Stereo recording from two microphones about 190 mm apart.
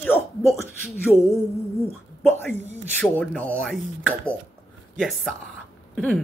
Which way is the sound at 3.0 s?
5° left (ahead or behind).